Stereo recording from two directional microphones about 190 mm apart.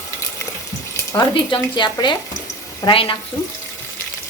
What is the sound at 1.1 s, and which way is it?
Speech, 25° left (ahead or behind).